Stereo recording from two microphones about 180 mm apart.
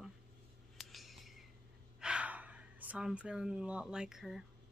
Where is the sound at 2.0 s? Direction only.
5° right (ahead or behind).